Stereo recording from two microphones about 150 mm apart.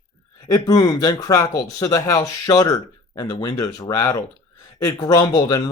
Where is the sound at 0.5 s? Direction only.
25° left (ahead or behind).